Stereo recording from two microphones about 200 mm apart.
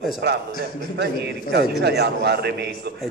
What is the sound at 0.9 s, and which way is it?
A man's voice, 55° right (ahead or behind).